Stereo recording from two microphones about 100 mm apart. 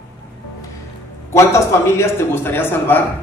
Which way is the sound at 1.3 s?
25° left (ahead or behind).